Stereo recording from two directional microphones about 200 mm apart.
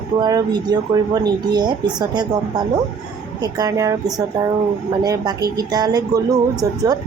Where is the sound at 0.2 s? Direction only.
20° right (ahead or behind).